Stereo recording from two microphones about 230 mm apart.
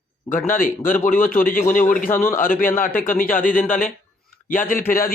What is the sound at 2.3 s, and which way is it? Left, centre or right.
Speech, left.